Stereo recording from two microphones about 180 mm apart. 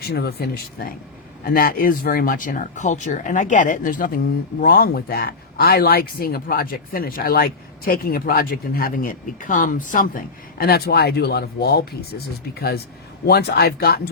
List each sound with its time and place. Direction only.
0.0 s speech: 60° left (ahead or behind)